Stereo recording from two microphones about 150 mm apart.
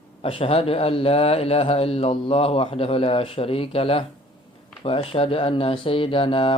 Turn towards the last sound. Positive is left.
turn(degrees=35)  # may be behind; listen again after turning